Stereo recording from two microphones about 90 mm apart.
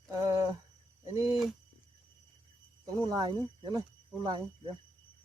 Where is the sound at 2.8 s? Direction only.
40° right (ahead or behind).